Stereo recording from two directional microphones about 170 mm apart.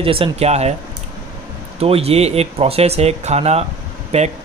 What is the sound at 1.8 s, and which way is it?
Speech, 35° right (ahead or behind).